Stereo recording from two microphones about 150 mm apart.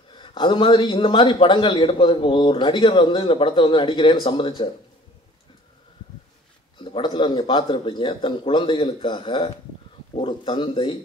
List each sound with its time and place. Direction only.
0.1 s a man's voice: 30° left (ahead or behind)
6.8 s a man's voice: 30° left (ahead or behind)